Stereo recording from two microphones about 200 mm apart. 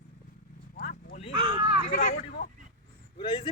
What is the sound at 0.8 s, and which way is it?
Horse, 40° left (ahead or behind).